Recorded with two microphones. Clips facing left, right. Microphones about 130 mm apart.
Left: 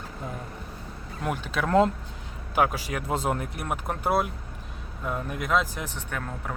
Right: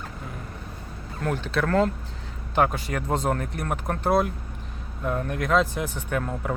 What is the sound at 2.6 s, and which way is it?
Speech, 5° left (ahead or behind).